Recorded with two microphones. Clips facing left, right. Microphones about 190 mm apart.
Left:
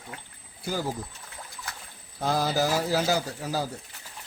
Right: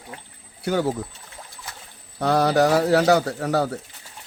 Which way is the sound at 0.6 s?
70° right (ahead or behind).